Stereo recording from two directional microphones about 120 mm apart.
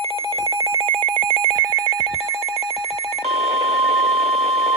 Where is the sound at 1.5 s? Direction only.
30° right (ahead or behind).